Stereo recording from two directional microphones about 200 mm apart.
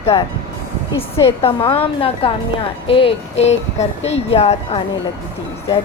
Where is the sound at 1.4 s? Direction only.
25° left (ahead or behind).